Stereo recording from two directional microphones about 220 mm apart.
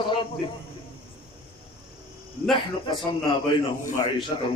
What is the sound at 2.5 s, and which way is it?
Speech, 20° left (ahead or behind).